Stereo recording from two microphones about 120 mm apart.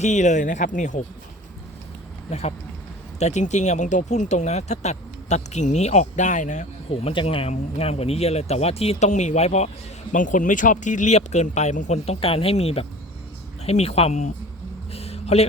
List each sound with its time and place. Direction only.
0.0 s speech: 85° left
3.2 s speech: 70° left (ahead or behind); by 6.7 s 90° left
6.9 s speech: 50° left (ahead or behind); by 9.6 s 65° left (ahead or behind)
10.1 s speech: 90° left; by 14.3 s 65° left (ahead or behind)
14.9 s a sound: 60° left (ahead or behind)